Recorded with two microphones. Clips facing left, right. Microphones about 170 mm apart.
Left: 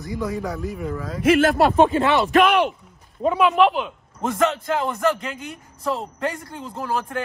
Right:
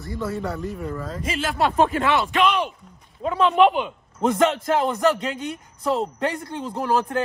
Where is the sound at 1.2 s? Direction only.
55° left (ahead or behind).